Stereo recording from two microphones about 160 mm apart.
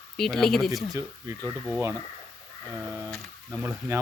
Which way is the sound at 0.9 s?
20° right (ahead or behind).